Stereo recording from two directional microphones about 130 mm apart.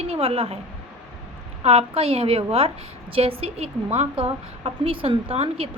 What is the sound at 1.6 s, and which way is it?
A woman's voice, 50° right (ahead or behind).